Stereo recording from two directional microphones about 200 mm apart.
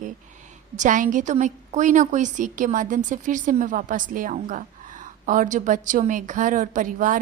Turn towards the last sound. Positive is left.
turn(degrees=-40)  # may be behind; listen again after turning